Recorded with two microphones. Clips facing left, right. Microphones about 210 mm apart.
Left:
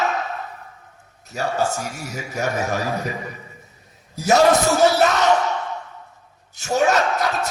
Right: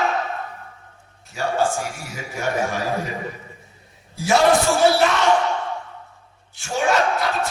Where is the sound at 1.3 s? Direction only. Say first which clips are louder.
Right 1 dB; 40° left (ahead or behind).